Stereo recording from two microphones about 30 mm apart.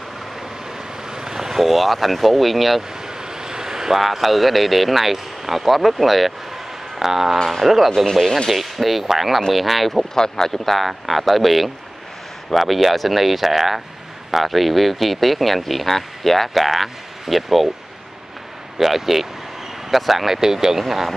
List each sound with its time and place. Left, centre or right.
1.1 s speech: centre
3.2 s a sound: right; by 5.6 s centre
5.6 s speech: centre
10.1 s speech: centre
10.6 s speech: centre
18.8 s speech: centre
20.3 s speech: centre